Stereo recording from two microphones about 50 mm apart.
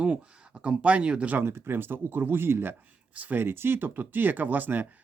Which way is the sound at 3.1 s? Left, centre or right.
Right.